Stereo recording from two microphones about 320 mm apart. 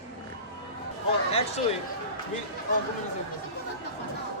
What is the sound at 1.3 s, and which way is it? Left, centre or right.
Speech, centre.